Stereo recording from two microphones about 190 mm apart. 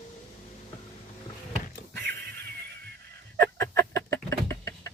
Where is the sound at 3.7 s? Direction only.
60° right (ahead or behind).